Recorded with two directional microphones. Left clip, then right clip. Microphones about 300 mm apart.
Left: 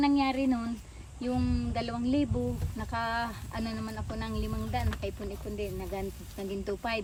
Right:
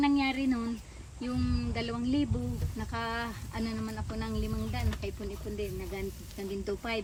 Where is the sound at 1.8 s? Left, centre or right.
Left.